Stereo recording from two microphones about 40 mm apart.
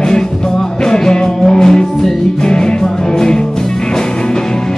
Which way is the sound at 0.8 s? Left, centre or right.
Centre.